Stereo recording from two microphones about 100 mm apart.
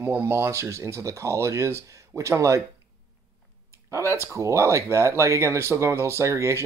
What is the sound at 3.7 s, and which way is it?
Speech, 30° right (ahead or behind).